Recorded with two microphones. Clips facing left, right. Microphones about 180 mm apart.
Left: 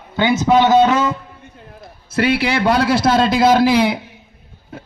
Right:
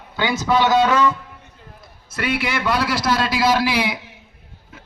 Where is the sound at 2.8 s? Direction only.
25° left (ahead or behind).